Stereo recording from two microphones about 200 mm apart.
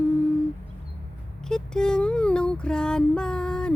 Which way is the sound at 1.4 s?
5° left (ahead or behind).